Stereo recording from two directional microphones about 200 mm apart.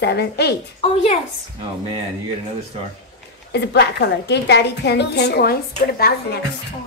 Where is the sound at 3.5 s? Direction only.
55° left (ahead or behind).